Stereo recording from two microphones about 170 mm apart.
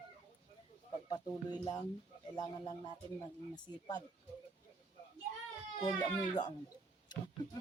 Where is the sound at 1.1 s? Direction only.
25° left (ahead or behind).